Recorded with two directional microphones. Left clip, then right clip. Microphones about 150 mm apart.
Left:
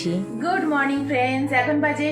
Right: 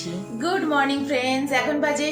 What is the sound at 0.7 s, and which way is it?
A woman's voice, 25° right (ahead or behind).